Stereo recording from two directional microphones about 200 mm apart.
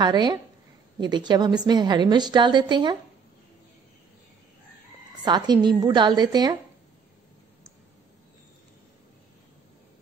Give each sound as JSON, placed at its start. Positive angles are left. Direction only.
{"t": 0.0, "sound": "a woman's voice", "side_deg": -20}
{"t": 5.2, "sound": "a woman's voice", "side_deg": -20}